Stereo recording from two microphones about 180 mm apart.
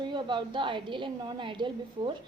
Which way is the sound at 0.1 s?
25° right (ahead or behind).